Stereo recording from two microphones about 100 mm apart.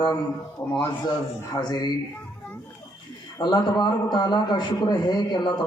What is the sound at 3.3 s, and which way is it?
A man's voice, 50° left (ahead or behind).